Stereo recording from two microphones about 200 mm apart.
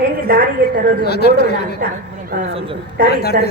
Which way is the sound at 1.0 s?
55° left (ahead or behind).